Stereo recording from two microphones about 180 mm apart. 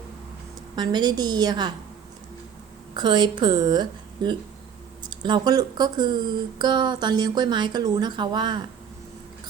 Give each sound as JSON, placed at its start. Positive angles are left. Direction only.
{"t": 0.8, "sound": "speech", "side_deg": -25}
{"t": 2.9, "sound": "speech", "side_deg": -25}